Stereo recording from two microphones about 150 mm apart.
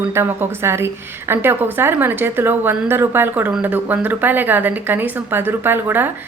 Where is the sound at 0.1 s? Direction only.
15° right (ahead or behind).